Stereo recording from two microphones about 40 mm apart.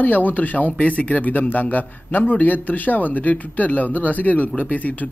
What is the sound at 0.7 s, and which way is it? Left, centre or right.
Speech, left.